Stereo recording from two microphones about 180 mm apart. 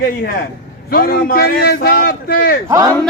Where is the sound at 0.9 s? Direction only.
55° left (ahead or behind).